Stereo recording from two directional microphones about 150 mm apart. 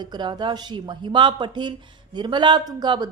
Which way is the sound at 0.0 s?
30° right (ahead or behind).